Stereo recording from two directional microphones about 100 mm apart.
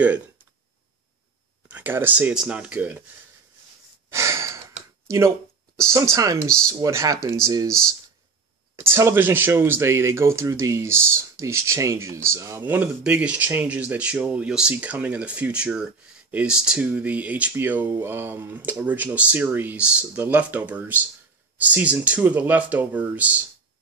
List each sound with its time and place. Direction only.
1.7 s speech: 20° right (ahead or behind)
4.1 s breathing: 30° right (ahead or behind)
5.0 s speech: 30° right (ahead or behind)
8.7 s speech: 25° right (ahead or behind)
12.6 s speech: 20° right (ahead or behind)